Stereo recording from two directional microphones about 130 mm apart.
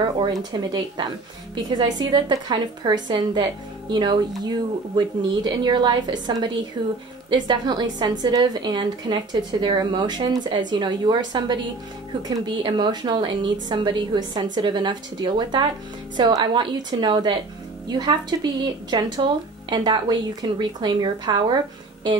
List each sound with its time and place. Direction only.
0.2 s a woman's voice: 35° right (ahead or behind)